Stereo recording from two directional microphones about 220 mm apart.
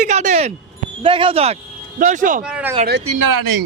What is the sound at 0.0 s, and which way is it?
A man's voice, 35° right (ahead or behind).